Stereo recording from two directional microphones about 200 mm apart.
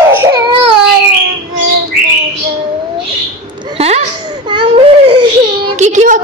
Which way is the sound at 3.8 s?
30° right (ahead or behind).